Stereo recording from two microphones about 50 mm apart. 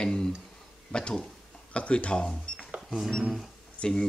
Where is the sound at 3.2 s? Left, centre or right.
Centre.